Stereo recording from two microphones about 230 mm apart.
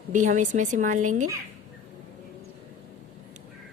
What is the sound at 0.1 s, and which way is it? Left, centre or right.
A woman's voice, right.